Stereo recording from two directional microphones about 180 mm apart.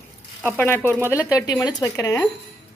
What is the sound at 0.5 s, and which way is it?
Speech, 10° left (ahead or behind).